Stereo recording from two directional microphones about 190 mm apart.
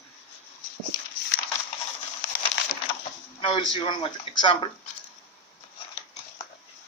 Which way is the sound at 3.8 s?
25° left (ahead or behind).